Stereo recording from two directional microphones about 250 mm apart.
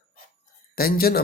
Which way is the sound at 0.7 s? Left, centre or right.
Left.